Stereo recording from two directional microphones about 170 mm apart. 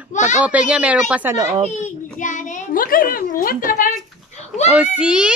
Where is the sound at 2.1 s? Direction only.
50° left (ahead or behind).